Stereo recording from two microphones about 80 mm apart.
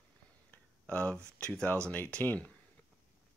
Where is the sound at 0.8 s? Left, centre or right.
Centre.